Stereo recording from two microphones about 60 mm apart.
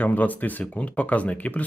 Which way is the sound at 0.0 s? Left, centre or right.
Left.